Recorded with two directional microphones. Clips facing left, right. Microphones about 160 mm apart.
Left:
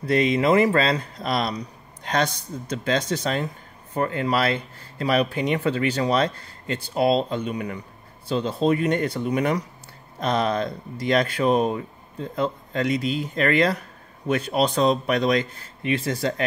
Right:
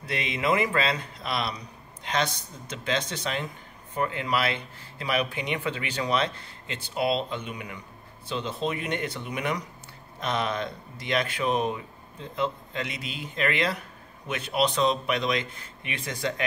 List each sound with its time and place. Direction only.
0.0 s speech: 40° left (ahead or behind)